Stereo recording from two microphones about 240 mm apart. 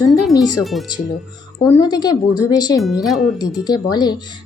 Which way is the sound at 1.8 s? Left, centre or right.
Centre.